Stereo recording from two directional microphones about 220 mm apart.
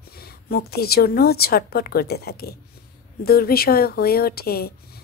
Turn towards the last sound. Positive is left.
turn(degrees=45)  # may be behind; listen again after turning